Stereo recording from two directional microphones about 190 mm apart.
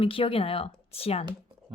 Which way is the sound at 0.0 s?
30° left (ahead or behind).